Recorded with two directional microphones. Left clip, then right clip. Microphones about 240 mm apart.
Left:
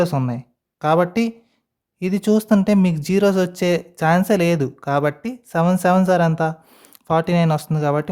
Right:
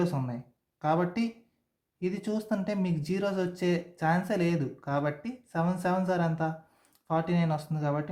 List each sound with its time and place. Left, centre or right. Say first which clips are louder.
0.0 s speech: left 11 dB; left